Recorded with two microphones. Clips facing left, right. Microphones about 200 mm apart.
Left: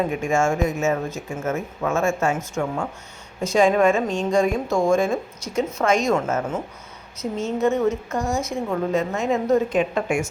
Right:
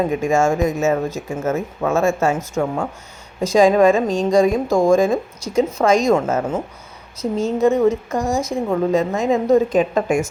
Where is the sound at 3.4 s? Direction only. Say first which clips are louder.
Right 4 dB; 35° right (ahead or behind).